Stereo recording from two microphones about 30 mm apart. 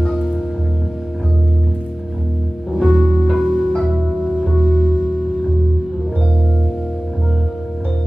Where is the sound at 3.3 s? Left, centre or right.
Centre.